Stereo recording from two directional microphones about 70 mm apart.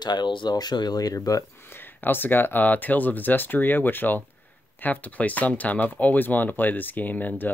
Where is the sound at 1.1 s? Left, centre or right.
Left.